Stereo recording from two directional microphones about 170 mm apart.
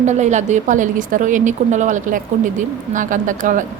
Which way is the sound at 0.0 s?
45° right (ahead or behind).